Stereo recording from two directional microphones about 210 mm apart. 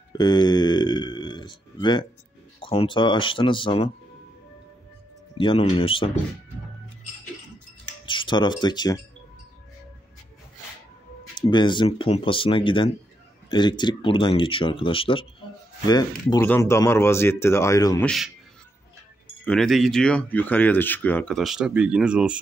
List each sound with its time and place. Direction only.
0.2 s speech: 20° left (ahead or behind)
5.4 s speech: 25° left (ahead or behind)
8.0 s speech: 25° left (ahead or behind)
11.3 s speech: 20° left (ahead or behind)
18.0 s speech: centre (ahead or behind)
19.4 s speech: 5° left (ahead or behind)